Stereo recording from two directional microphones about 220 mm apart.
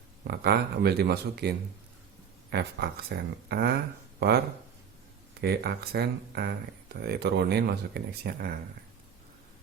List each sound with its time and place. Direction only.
0.3 s speech: 45° right (ahead or behind)
5.4 s speech: 45° right (ahead or behind)